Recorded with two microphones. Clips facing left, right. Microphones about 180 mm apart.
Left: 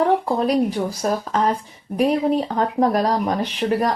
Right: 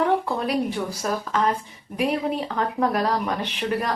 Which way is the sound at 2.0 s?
40° left (ahead or behind).